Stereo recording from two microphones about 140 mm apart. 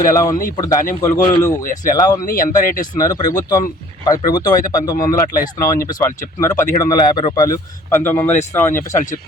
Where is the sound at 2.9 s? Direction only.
25° left (ahead or behind).